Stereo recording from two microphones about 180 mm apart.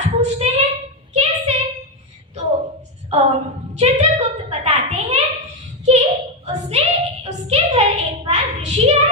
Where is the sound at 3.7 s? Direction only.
35° right (ahead or behind).